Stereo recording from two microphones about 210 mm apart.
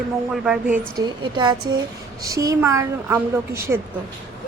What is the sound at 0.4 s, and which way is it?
Speech, 5° right (ahead or behind).